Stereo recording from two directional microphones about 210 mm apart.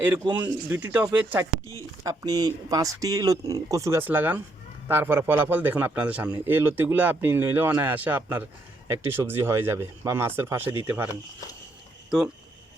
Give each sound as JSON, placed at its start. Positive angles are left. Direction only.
{"t": 0.3, "sound": "a man's voice", "side_deg": -10}